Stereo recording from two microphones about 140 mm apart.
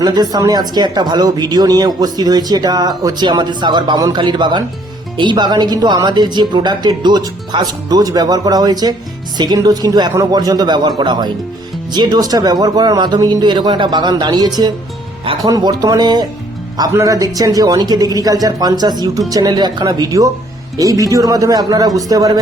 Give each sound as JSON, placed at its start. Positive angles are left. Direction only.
{"t": 0.0, "sound": "a woman's voice", "side_deg": -30}
{"t": 15.5, "sound": "a woman's voice", "side_deg": -25}